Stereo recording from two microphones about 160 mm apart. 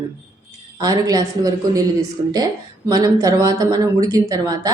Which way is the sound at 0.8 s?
20° right (ahead or behind).